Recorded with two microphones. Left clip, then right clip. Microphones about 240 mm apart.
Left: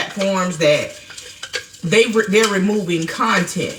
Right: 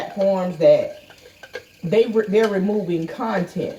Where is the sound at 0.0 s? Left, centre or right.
Right.